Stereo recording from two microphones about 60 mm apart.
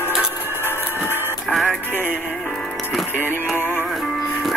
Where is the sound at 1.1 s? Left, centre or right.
Right.